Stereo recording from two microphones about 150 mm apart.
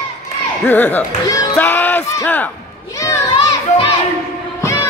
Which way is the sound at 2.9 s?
20° left (ahead or behind).